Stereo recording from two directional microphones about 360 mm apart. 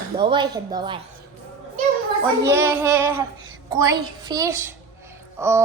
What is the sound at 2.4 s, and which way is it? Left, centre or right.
A child's voice, centre.